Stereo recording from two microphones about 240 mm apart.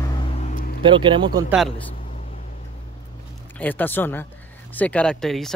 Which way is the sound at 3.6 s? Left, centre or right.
Centre.